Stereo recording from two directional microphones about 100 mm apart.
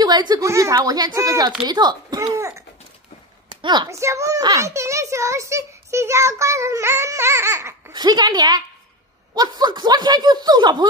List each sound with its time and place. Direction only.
0.0 s a woman's voice: 45° right (ahead or behind)
0.4 s speech: 30° right (ahead or behind)
1.7 s speech: 45° right (ahead or behind)
2.3 s a sound: 30° right (ahead or behind)
3.6 s speech: 50° right (ahead or behind)
3.9 s a child's voice: 30° right (ahead or behind)
7.9 s speech: 45° right (ahead or behind)